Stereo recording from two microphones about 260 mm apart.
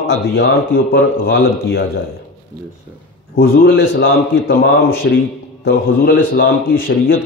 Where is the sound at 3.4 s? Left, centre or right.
Left.